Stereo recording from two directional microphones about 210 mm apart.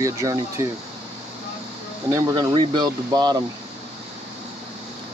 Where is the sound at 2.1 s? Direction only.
15° right (ahead or behind).